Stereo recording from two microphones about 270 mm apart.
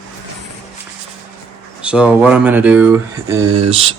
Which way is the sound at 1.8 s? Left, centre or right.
Centre.